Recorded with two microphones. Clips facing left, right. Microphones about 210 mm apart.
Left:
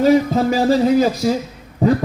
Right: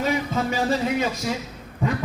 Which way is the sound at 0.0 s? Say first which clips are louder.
Left 10 dB; 35° left (ahead or behind).